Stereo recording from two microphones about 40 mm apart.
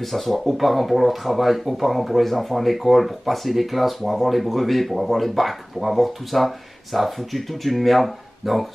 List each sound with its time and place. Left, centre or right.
0.0 s speech: centre